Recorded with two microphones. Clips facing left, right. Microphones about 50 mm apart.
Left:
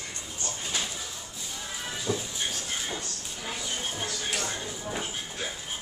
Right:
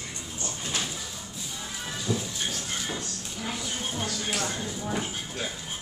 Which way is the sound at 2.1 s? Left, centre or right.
Left.